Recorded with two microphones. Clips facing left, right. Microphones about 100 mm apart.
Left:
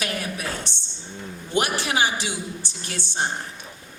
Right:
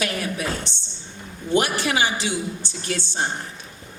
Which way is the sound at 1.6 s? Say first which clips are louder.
Right 1 dB; 20° left (ahead or behind).